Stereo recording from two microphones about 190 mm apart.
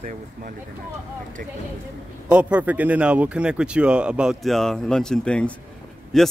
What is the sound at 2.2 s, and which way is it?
Speech, 5° right (ahead or behind).